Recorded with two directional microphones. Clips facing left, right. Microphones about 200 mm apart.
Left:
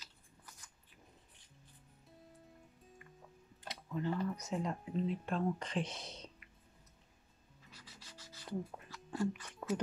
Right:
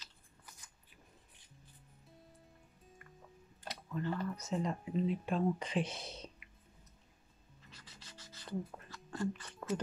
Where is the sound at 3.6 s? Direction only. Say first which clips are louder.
Left 1 dB; 20° left (ahead or behind).